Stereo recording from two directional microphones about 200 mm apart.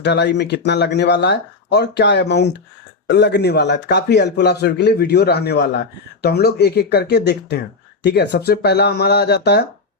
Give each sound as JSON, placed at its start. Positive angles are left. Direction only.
{"t": 0.0, "sound": "a man's voice", "side_deg": 60}